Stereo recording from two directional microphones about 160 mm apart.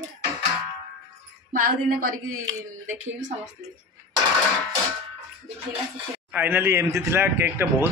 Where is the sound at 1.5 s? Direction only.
60° right (ahead or behind).